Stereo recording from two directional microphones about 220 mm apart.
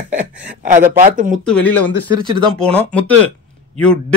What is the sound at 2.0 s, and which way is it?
Speech, 20° right (ahead or behind).